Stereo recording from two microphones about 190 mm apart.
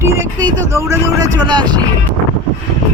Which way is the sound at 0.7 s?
15° right (ahead or behind).